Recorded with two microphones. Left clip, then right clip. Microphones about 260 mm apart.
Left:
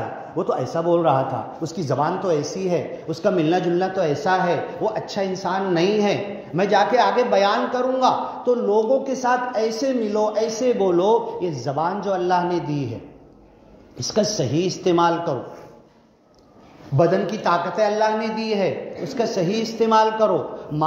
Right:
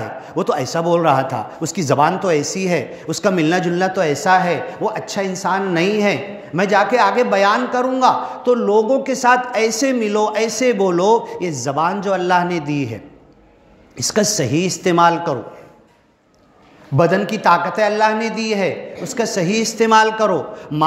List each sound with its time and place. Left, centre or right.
0.4 s a man's voice: right
16.9 s a man's voice: right